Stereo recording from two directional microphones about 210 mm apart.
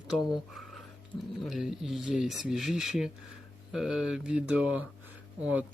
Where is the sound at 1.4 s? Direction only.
Centre (ahead or behind).